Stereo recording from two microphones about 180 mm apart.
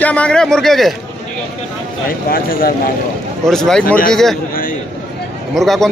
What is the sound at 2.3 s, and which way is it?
Speech, 55° left (ahead or behind).